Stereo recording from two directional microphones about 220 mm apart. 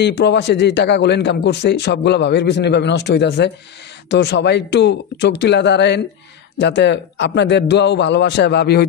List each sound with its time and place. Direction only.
0.0 s a man's voice: 50° left (ahead or behind)